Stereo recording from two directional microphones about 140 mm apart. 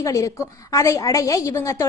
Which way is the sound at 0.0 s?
25° left (ahead or behind).